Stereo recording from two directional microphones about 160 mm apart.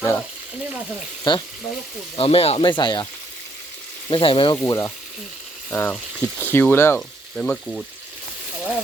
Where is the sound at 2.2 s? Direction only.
35° left (ahead or behind).